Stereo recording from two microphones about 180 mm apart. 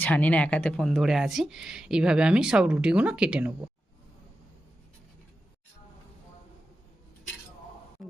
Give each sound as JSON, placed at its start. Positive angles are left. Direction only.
{"t": 0.0, "sound": "speech", "side_deg": 10}